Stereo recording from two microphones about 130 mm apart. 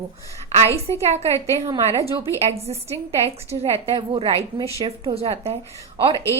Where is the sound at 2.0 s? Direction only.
20° right (ahead or behind).